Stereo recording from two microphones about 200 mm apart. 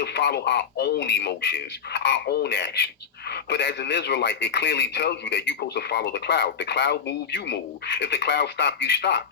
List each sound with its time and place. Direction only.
0.0 s speech: 55° left (ahead or behind)